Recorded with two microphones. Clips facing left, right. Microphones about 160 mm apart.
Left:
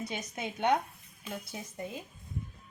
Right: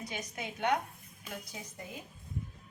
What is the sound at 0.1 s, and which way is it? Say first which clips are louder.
Speech: left 3 dB; 20° left (ahead or behind).